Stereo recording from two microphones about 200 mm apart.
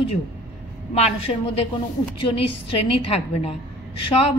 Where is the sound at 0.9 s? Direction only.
30° left (ahead or behind).